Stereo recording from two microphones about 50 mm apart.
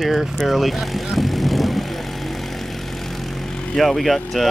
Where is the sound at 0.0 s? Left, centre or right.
Centre.